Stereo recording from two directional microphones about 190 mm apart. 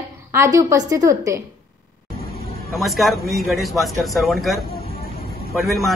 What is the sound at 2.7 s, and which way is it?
A man's voice, centre (ahead or behind).